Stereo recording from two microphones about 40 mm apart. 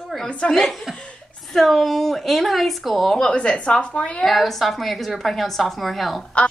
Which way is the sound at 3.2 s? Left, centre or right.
Left.